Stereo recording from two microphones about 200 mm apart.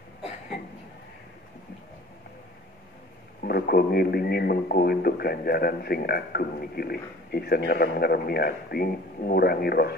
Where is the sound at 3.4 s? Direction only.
50° left (ahead or behind).